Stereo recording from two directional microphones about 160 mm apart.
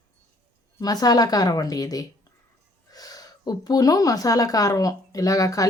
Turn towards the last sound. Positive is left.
turn(degrees=20)  # may be behind; listen again after turning